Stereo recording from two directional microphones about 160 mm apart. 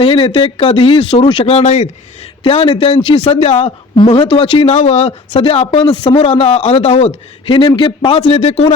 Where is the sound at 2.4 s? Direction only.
30° left (ahead or behind).